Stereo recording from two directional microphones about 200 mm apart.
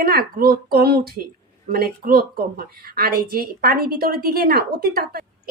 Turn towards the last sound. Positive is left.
turn(degrees=-50)  # may be behind; listen again after turning